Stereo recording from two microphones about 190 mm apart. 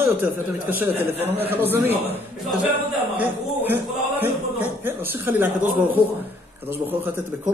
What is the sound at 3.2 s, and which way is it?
A man's voice, 10° right (ahead or behind).